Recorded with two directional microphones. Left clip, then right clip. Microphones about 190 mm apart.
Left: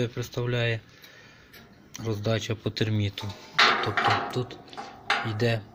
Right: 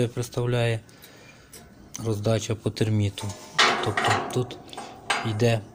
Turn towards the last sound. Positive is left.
turn(degrees=-5)  # may be behind; listen again after turning